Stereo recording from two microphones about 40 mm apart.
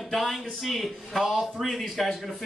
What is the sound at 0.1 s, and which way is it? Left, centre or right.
A man's voice, centre.